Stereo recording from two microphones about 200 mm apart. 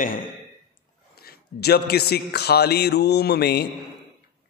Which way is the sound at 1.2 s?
50° left (ahead or behind).